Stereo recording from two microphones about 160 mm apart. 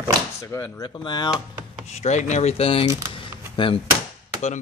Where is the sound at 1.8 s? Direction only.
45° left (ahead or behind).